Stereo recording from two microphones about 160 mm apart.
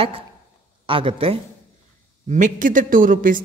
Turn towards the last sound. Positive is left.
turn(degrees=-55)  # may be behind; listen again after turning